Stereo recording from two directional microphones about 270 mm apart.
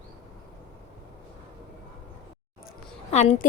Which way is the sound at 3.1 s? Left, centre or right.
Left.